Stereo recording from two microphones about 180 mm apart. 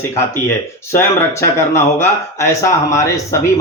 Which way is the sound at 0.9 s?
15° left (ahead or behind).